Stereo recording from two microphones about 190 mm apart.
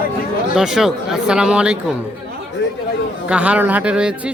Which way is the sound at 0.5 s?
5° right (ahead or behind).